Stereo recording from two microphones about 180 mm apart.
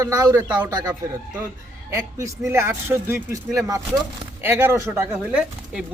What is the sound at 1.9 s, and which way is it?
Speech, 15° right (ahead or behind).